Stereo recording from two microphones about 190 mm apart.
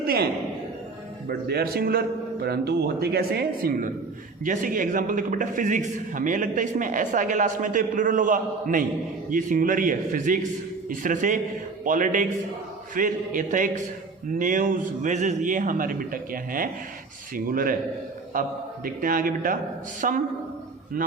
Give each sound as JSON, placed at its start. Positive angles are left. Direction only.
{"t": 0.0, "sound": "a man's voice", "side_deg": -55}
{"t": 1.3, "sound": "a man's voice", "side_deg": -55}